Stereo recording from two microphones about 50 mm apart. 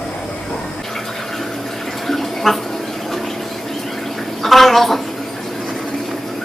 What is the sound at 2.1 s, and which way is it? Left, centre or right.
Bathtub, centre.